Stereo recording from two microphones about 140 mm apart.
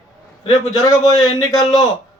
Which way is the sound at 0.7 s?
25° left (ahead or behind).